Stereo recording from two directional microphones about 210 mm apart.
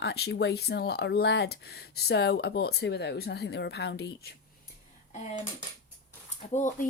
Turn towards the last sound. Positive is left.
turn(degrees=35)  # may be behind; listen again after turning